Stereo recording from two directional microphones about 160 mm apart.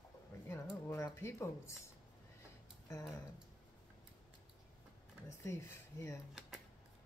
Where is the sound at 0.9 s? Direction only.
15° left (ahead or behind).